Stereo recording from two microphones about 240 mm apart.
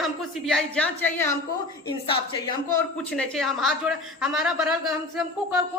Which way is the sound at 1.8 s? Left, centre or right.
Centre.